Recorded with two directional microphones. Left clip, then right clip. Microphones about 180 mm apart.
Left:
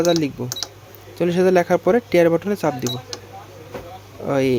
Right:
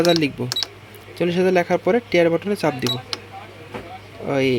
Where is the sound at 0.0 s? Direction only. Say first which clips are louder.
Right 1 dB; 5° right (ahead or behind).